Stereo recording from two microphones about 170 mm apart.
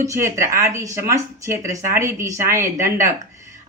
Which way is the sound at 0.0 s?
15° right (ahead or behind).